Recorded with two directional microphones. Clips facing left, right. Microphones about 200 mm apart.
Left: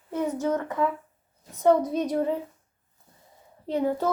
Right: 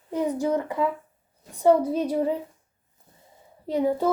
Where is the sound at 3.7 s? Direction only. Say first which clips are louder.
Right 2 dB; 10° right (ahead or behind).